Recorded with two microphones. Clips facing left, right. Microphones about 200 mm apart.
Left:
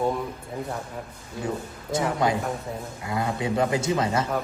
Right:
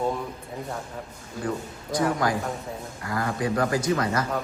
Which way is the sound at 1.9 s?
25° left (ahead or behind).